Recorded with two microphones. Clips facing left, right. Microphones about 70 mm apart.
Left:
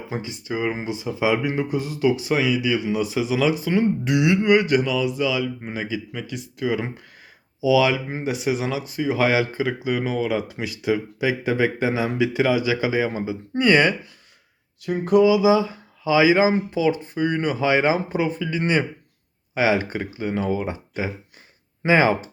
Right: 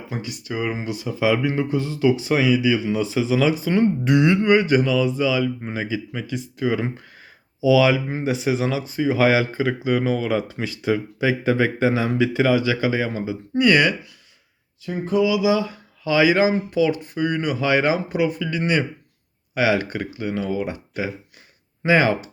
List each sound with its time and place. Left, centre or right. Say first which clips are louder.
0.1 s speech: left 1 dB; left
14.8 s a sound: left 4 dB; left
15.2 s speech: left 2 dB; left
19.5 s speech: even; left